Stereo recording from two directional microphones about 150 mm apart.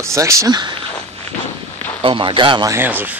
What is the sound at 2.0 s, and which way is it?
Speech, 35° right (ahead or behind).